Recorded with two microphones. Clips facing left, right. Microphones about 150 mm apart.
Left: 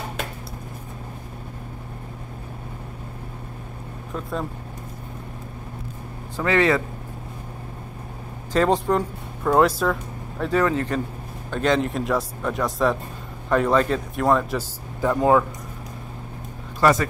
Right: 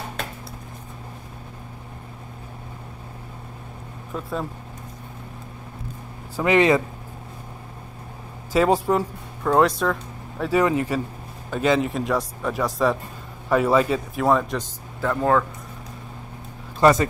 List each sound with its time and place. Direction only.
4.1 s speech: centre (ahead or behind)
6.3 s speech: 15° right (ahead or behind)
8.5 s speech: 10° right (ahead or behind)
9.4 s speech: 5° left (ahead or behind)
10.4 s speech: 10° right (ahead or behind)
15.0 s speech: 15° left (ahead or behind)
16.8 s speech: 20° right (ahead or behind)